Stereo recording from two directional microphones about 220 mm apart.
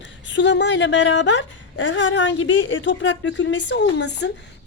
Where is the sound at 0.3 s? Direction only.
55° left (ahead or behind).